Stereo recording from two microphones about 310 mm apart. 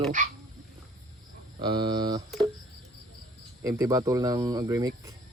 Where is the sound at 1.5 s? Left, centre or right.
Centre.